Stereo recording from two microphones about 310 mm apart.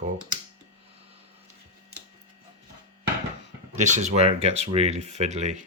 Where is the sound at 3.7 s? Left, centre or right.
Right.